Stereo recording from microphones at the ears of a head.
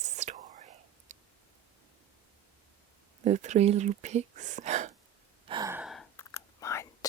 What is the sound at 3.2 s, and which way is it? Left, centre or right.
Speech, right.